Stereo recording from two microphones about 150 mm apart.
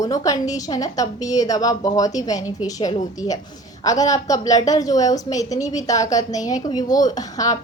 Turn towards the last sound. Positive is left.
turn(degrees=25)  # may be behind; listen again after turning